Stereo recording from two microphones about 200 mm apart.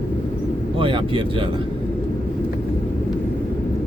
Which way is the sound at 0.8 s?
25° right (ahead or behind).